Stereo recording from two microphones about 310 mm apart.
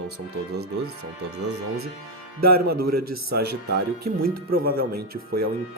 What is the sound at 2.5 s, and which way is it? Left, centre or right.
Speech, right.